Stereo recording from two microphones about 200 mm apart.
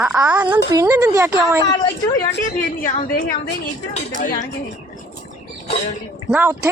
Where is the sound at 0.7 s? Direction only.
15° right (ahead or behind).